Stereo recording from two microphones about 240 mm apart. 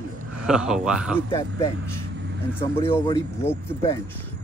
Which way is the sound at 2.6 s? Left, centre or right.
Left.